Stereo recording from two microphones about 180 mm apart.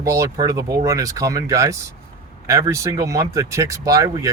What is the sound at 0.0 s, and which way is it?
Speech, 20° right (ahead or behind).